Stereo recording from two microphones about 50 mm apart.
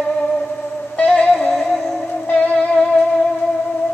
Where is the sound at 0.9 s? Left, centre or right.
Left.